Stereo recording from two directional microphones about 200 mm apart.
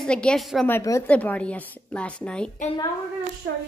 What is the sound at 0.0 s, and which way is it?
Speech, 5° left (ahead or behind).